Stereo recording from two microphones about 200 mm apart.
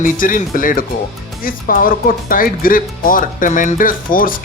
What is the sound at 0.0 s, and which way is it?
Speech, 45° left (ahead or behind).